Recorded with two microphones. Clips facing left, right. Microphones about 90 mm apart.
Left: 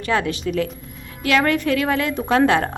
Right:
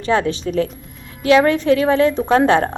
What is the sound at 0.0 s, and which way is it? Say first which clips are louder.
A woman's voice: right 3 dB; 30° right (ahead or behind).